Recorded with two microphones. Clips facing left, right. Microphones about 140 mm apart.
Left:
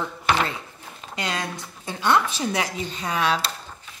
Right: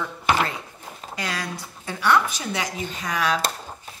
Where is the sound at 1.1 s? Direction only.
20° left (ahead or behind).